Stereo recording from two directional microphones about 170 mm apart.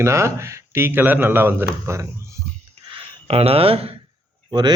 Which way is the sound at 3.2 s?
35° right (ahead or behind).